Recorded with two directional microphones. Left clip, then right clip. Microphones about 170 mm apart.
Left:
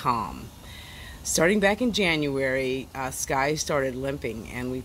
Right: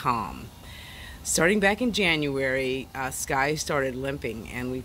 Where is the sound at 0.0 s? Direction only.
Centre (ahead or behind).